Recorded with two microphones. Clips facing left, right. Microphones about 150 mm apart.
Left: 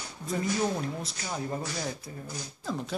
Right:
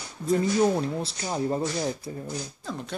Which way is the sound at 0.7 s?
30° right (ahead or behind).